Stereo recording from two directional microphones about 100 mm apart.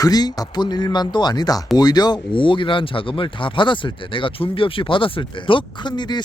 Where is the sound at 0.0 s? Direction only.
40° left (ahead or behind).